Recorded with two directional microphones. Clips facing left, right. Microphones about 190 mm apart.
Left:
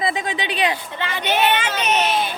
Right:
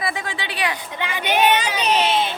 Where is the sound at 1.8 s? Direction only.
30° right (ahead or behind).